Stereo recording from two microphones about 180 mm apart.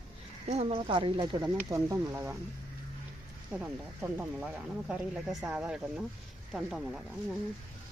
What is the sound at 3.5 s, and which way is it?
Speech, 10° right (ahead or behind).